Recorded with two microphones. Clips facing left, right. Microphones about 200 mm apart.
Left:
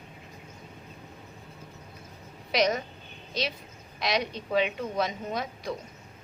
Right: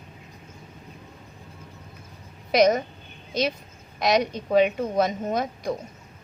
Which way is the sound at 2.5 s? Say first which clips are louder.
Right 7 dB; 45° right (ahead or behind).